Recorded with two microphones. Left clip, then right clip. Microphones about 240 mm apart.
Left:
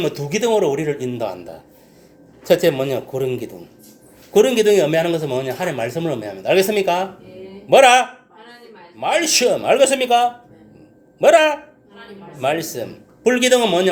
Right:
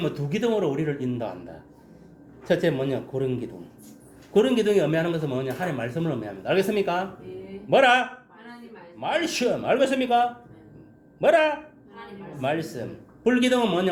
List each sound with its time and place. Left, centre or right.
0.0 s a man's voice: centre